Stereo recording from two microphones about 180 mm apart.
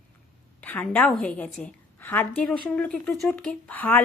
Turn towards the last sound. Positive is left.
turn(degrees=10)  # may be behind; listen again after turning